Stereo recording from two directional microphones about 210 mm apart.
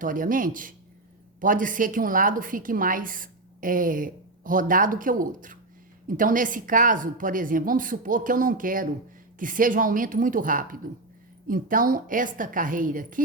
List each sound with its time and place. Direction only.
0.0 s a woman's voice: 40° right (ahead or behind)